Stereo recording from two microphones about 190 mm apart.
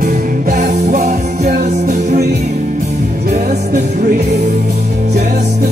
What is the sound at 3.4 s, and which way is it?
Music, 40° right (ahead or behind).